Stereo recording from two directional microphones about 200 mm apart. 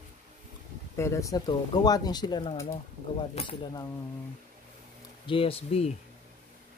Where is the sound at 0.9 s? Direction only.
15° left (ahead or behind).